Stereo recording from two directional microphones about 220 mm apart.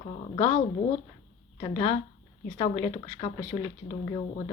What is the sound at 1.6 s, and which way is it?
Speech, 20° left (ahead or behind).